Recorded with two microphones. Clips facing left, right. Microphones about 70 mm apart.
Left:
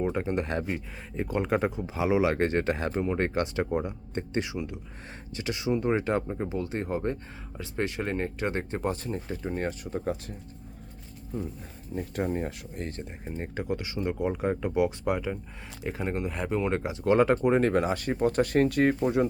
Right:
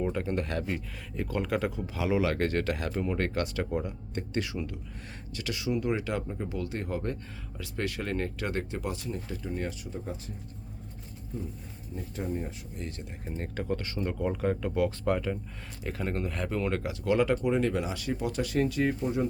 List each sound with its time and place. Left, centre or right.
0.0 s speech: left
10.0 s speech: left
11.9 s speech: left
12.7 s speech: left
13.2 s speech: centre; by 19.3 s left